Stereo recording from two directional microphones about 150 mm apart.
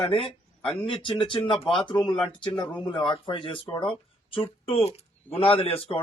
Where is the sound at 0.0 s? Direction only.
40° left (ahead or behind).